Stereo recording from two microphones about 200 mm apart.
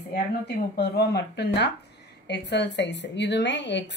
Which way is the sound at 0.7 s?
55° left (ahead or behind).